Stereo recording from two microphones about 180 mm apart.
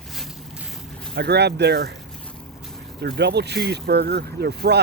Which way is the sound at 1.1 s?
65° right (ahead or behind).